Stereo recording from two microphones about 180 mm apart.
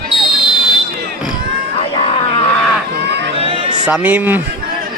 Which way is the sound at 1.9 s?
35° left (ahead or behind).